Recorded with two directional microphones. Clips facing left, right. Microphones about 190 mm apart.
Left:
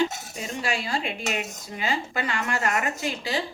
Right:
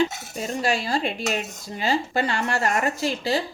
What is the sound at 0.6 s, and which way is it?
Speech, 40° right (ahead or behind).